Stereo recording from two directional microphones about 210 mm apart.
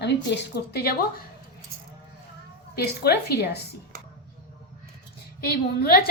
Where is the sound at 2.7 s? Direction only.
50° left (ahead or behind).